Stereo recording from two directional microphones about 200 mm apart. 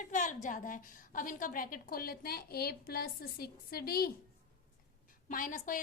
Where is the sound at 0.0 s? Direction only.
40° left (ahead or behind).